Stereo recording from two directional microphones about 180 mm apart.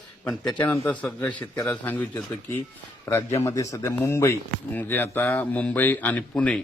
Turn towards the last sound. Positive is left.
turn(degrees=5)  # may be behind; listen again after turning